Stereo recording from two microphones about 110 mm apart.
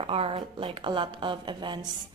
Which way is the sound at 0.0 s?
60° right (ahead or behind).